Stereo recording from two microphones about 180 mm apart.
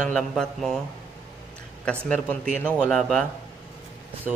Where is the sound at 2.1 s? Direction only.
10° left (ahead or behind).